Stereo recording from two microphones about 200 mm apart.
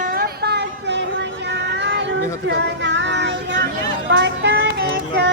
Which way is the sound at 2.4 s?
65° right (ahead or behind).